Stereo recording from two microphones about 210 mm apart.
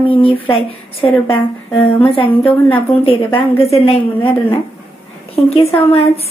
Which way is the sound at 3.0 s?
25° left (ahead or behind).